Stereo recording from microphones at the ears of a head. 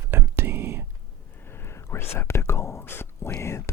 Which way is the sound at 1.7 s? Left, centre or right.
Left.